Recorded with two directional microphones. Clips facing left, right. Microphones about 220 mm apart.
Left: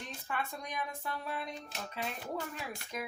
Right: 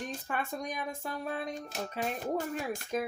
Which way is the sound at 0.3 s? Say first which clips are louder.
Right 2 dB; 45° right (ahead or behind).